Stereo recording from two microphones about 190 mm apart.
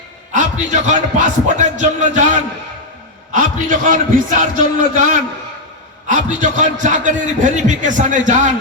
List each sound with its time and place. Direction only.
0.3 s a man's voice: 40° right (ahead or behind)
6.1 s a man's voice: 40° right (ahead or behind)